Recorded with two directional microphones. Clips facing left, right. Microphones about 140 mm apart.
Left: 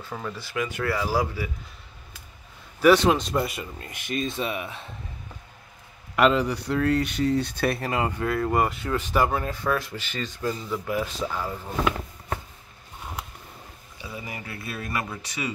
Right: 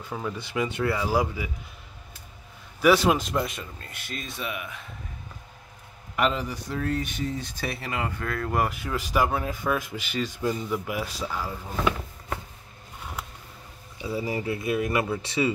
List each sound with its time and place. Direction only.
0.4 s speech: 20° right (ahead or behind)
2.8 s speech: 5° right (ahead or behind)
3.8 s speech: 20° left (ahead or behind)
6.1 s speech: 80° left; by 7.8 s 60° left (ahead or behind)
7.8 s speech: 35° left (ahead or behind)
8.2 s speech: 20° left (ahead or behind)
8.5 s speech: 5° right (ahead or behind)
13.9 s speech: 25° right (ahead or behind)